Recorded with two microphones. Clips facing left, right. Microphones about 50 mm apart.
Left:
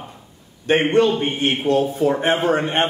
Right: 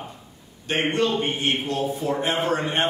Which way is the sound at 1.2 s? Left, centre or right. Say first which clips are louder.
Left 3 dB; left.